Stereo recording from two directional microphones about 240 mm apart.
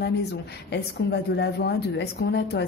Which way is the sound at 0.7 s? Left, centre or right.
Left.